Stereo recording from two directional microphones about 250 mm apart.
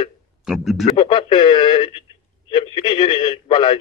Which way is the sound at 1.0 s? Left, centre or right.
Centre.